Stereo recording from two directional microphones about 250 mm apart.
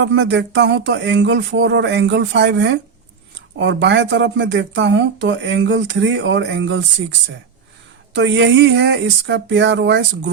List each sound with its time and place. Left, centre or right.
0.0 s speech: right
8.1 s speech: right